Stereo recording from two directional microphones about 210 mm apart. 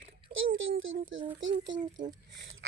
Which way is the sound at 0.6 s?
65° right (ahead or behind).